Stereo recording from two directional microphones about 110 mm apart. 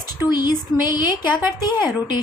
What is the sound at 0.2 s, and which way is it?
A woman's voice, 40° left (ahead or behind).